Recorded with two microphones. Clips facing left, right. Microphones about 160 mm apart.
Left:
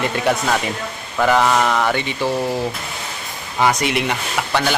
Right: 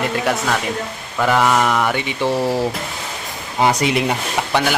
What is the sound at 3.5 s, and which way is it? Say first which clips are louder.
Speech: right 1 dB; 25° right (ahead or behind).